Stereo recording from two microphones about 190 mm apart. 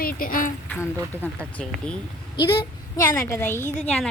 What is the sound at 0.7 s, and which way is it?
A woman's voice, 10° left (ahead or behind).